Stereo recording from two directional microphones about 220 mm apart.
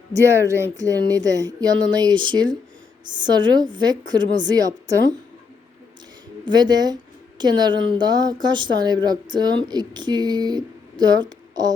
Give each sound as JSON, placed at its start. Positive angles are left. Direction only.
{"t": 0.1, "sound": "a woman's voice", "side_deg": -15}
{"t": 6.4, "sound": "a woman's voice", "side_deg": -20}